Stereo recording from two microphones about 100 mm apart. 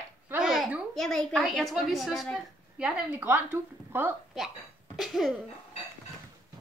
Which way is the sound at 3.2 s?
20° right (ahead or behind).